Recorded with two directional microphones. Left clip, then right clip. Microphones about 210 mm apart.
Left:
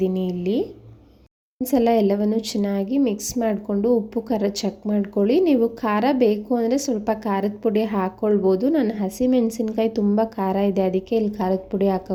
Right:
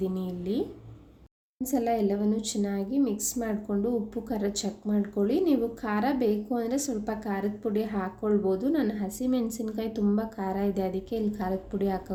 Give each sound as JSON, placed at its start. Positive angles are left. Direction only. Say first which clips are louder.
{"t": 0.0, "sound": "speech", "louder": "left 9 dB", "side_deg": 30}
{"t": 1.6, "sound": "speech", "louder": "left 9 dB", "side_deg": 40}